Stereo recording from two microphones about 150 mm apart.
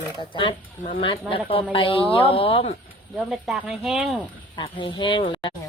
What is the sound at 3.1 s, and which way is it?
Speech, centre (ahead or behind).